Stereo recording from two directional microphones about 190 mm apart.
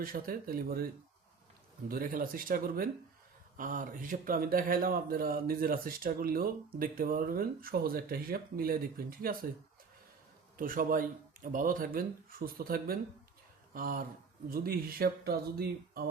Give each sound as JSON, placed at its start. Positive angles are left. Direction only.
{"t": 0.0, "sound": "a man's voice", "side_deg": -50}
{"t": 1.9, "sound": "a man's voice", "side_deg": -50}
{"t": 10.6, "sound": "a man's voice", "side_deg": -45}